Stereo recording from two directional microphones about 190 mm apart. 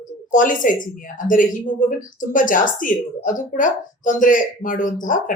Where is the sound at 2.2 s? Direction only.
45° left (ahead or behind).